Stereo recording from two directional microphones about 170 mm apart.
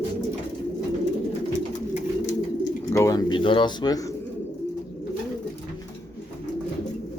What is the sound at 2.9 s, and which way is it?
Speech, 15° left (ahead or behind).